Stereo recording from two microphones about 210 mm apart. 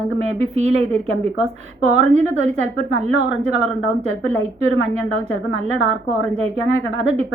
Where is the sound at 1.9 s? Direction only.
35° right (ahead or behind).